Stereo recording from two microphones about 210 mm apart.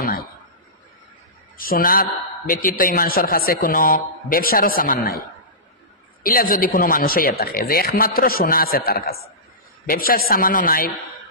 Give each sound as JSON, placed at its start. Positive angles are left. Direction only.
{"t": 0.0, "sound": "a sound", "side_deg": 45}
{"t": 1.6, "sound": "a man's voice", "side_deg": 45}
{"t": 6.2, "sound": "a man's voice", "side_deg": 45}